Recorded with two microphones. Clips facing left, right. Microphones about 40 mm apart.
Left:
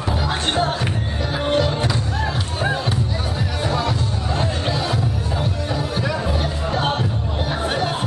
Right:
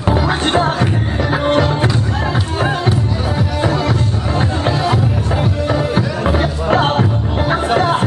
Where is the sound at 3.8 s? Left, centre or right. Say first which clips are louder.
Right 5 dB; right.